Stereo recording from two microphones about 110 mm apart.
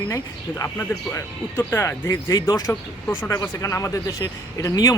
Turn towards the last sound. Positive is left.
turn(degrees=30)  # may be behind; listen again after turning